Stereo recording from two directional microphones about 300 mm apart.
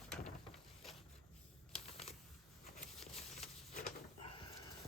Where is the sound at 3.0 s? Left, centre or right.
Centre.